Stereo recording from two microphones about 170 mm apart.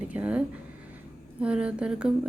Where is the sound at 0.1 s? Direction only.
10° right (ahead or behind).